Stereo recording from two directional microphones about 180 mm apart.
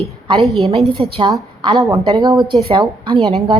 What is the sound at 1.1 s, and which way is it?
A woman's voice, 25° right (ahead or behind).